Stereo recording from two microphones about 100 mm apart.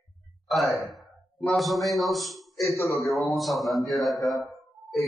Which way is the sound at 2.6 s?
30° left (ahead or behind).